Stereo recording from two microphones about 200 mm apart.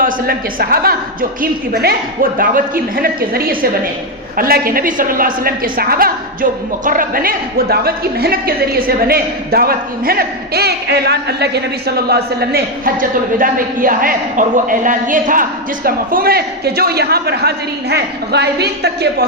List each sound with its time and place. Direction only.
0.0 s a woman's voice: 50° right (ahead or behind)